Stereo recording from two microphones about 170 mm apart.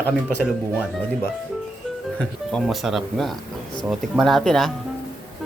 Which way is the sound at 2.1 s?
5° left (ahead or behind).